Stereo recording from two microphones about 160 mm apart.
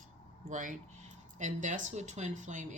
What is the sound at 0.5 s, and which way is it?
Speech, 55° right (ahead or behind).